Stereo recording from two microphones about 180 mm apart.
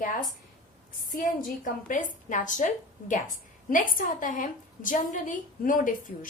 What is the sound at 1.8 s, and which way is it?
A woman's voice, 45° left (ahead or behind).